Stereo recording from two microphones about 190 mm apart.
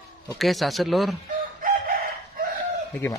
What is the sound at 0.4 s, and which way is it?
Speech, centre (ahead or behind).